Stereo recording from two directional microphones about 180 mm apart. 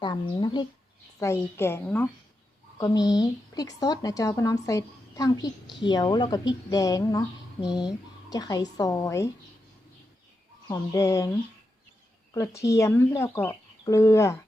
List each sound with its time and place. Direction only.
0.0 s a woman's voice: 25° left (ahead or behind)
1.2 s a woman's voice: 15° left (ahead or behind)
10.7 s speech: 15° left (ahead or behind)
12.3 s speech: 15° left (ahead or behind)